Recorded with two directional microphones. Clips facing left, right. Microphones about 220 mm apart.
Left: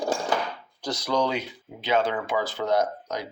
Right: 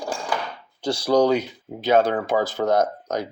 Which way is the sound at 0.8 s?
30° right (ahead or behind).